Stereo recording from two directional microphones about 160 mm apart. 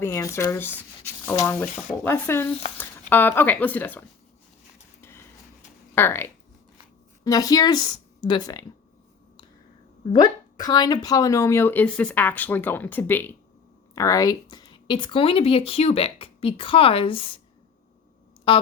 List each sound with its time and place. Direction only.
0.0 s speech: 20° left (ahead or behind)
4.9 s a sound: 15° left (ahead or behind)
5.9 s a woman's voice: 15° left (ahead or behind)
10.1 s speech: 25° left (ahead or behind)